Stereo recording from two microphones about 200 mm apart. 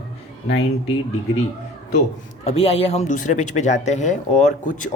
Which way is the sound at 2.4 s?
30° left (ahead or behind).